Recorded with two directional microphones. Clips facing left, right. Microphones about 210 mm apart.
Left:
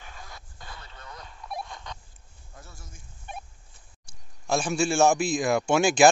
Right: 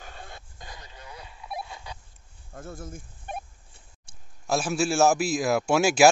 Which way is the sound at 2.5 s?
50° right (ahead or behind).